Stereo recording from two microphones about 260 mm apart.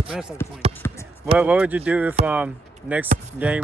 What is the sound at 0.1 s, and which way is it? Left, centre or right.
Speech, centre.